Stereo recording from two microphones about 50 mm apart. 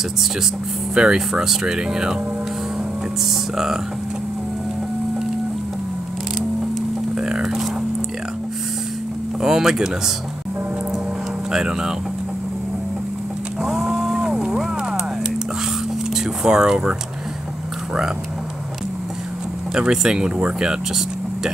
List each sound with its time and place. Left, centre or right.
0.9 s speech: centre
3.5 s speech: centre
7.2 s speech: centre
9.4 s speech: centre
11.5 s speech: centre
13.6 s a sound: centre
16.4 s speech: centre
19.7 s speech: centre